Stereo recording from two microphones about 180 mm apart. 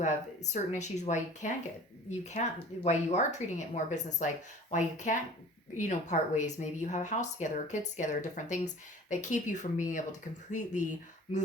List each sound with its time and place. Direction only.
0.0 s speech: 40° left (ahead or behind)